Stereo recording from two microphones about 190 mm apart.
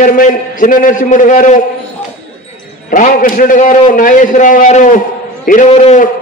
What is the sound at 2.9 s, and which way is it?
A man's voice, 45° left (ahead or behind).